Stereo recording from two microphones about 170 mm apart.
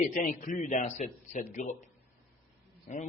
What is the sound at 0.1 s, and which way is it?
A man's voice, 50° left (ahead or behind).